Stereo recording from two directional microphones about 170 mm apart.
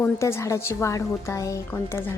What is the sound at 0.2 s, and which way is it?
A woman's voice, 15° left (ahead or behind).